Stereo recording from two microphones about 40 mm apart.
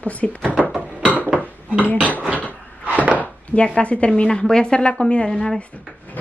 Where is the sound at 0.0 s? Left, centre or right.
Left.